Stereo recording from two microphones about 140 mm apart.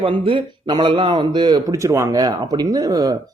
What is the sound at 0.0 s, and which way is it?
A man's voice, 35° right (ahead or behind).